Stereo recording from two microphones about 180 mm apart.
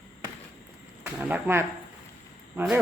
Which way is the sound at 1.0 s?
10° right (ahead or behind).